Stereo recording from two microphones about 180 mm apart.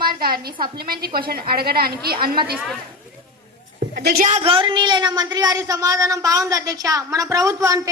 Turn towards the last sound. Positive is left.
turn(degrees=-20)  # may be behind; listen again after turning